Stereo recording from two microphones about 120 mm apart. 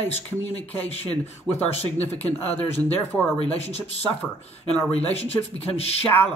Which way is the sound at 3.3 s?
60° left (ahead or behind).